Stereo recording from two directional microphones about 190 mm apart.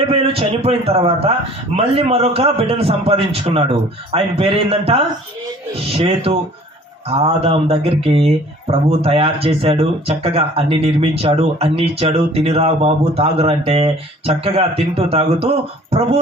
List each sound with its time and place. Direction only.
0.0 s speech: 30° right (ahead or behind)